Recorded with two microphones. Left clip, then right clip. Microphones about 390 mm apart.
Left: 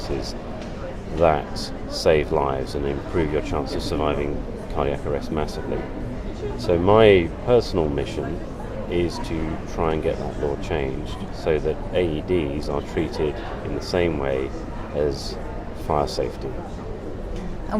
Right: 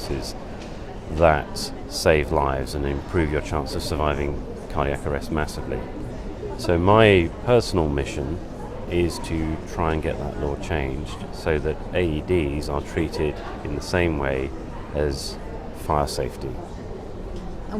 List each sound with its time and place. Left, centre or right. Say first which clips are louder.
1.2 s speech: right 1 dB; right
6.6 s speech: left 1 dB; right
11.4 s speech: left 2 dB; right